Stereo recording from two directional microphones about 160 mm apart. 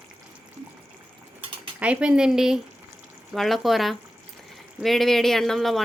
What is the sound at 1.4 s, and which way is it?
Mechanisms, 35° right (ahead or behind).